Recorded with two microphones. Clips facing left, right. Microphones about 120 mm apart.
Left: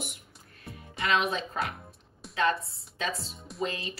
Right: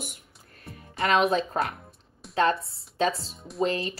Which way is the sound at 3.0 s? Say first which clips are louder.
Right 8 dB; 35° right (ahead or behind).